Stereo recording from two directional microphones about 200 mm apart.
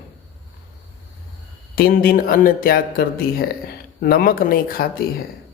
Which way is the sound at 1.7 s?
50° left (ahead or behind).